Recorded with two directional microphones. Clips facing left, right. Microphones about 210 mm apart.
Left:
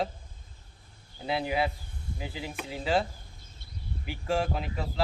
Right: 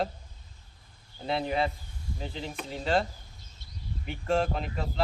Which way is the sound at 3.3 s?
50° left (ahead or behind).